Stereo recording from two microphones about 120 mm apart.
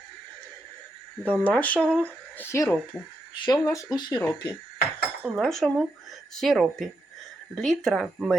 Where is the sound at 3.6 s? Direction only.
25° left (ahead or behind).